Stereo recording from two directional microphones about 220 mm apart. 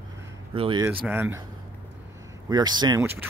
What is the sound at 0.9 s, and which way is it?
Speech, 10° right (ahead or behind).